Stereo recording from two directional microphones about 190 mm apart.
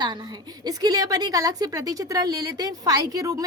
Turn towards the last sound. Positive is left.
turn(degrees=-20)  # may be behind; listen again after turning